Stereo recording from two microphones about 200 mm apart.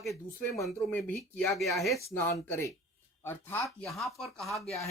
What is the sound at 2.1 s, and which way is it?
Speech, 15° left (ahead or behind).